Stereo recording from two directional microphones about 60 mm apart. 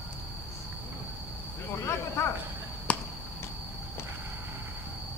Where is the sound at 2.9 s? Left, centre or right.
Left.